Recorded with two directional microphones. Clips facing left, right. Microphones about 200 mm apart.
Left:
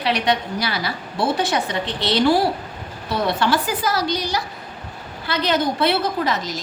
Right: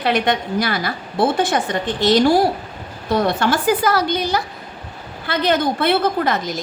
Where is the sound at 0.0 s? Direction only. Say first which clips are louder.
Right 2 dB; 50° right (ahead or behind).